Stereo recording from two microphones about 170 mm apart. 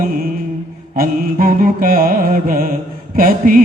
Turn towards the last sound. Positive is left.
turn(degrees=-55)  # may be behind; listen again after turning